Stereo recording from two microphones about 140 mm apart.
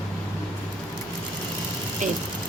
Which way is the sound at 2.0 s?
60° right (ahead or behind).